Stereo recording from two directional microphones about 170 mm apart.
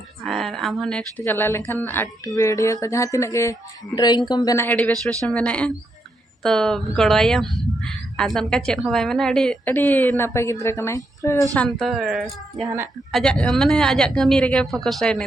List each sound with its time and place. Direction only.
0.3 s speech: centre (ahead or behind); by 11.4 s 20° left (ahead or behind)
11.5 s speech: 5° left (ahead or behind)